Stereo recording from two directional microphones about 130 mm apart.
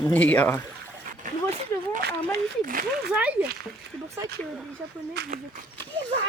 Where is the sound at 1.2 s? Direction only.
85° right.